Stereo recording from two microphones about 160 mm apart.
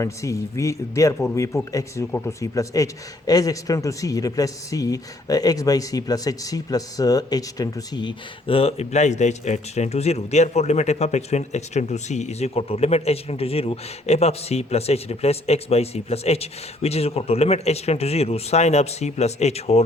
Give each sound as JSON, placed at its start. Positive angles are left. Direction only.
{"t": 0.0, "sound": "speech", "side_deg": 20}